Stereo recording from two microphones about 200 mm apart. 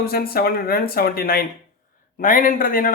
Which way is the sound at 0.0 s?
50° left (ahead or behind).